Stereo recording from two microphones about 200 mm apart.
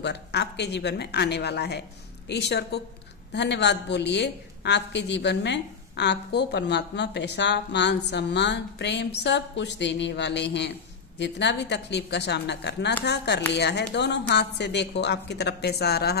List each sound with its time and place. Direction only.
0.0 s a woman's voice: 60° left (ahead or behind)